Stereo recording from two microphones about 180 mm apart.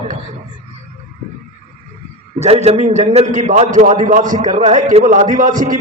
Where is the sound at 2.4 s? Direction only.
35° right (ahead or behind).